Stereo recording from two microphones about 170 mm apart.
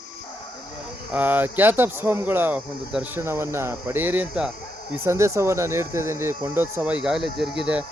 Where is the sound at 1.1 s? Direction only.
10° right (ahead or behind).